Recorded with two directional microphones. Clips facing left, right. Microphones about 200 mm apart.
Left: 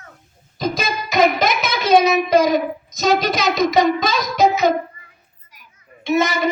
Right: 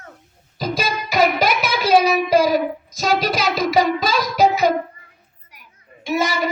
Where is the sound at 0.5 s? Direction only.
10° right (ahead or behind).